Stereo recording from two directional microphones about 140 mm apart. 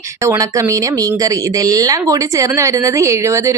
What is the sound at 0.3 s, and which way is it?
A woman's voice, 20° right (ahead or behind).